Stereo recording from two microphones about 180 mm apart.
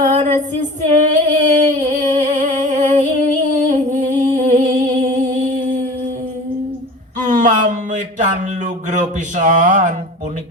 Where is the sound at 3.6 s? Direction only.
45° right (ahead or behind).